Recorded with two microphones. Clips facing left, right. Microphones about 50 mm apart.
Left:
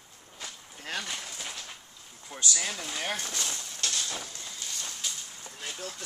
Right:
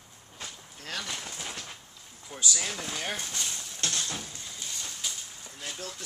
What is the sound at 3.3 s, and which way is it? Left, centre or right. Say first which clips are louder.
Speech: left 1 dB; left.